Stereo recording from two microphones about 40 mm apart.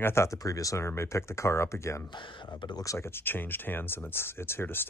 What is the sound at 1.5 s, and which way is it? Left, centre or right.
Speech, left.